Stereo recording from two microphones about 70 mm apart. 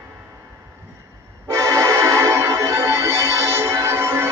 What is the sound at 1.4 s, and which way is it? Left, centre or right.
Music, right.